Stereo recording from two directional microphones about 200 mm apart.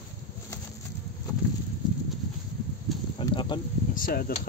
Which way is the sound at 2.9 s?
Centre (ahead or behind).